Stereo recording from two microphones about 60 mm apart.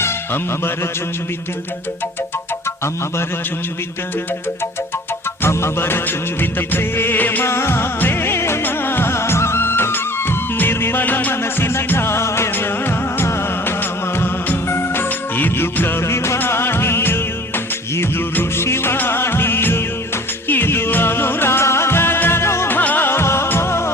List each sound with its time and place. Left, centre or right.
5.4 s music of bollywood: left
7.4 s music: left
8.6 s music of bollywood: left
12.5 s music: left
14.2 s music of bollywood: left
16.4 s music: left
22.8 s music: left
23.0 s music of bollywood: left